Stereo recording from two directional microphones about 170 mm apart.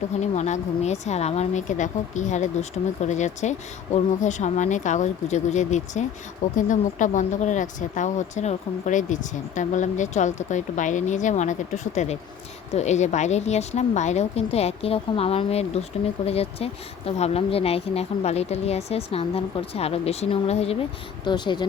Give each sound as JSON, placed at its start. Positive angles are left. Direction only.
{"t": 0.2, "sound": "a woman's voice", "side_deg": 40}
{"t": 21.2, "sound": "speech", "side_deg": 25}